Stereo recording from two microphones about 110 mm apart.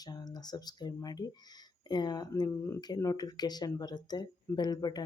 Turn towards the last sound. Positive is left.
turn(degrees=40)  # may be behind; listen again after turning